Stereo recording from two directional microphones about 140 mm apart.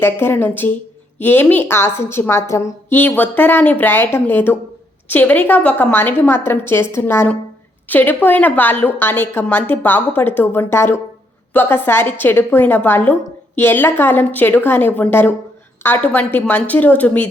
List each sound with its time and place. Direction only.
0.0 s a woman's voice: 15° left (ahead or behind)